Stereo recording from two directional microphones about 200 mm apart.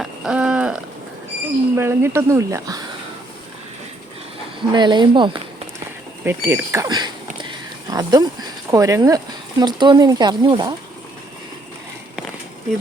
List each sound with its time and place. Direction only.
0.0 s a sound: 5° right (ahead or behind)
1.7 s speech: 10° right (ahead or behind)
4.7 s speech: 20° right (ahead or behind)
6.2 s speech: 10° right (ahead or behind)